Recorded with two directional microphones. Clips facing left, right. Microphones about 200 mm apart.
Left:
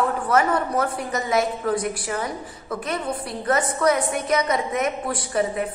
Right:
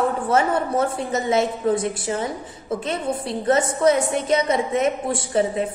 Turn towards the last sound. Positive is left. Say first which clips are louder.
# right 2 dB
turn(degrees=-25)  # may be behind; listen again after turning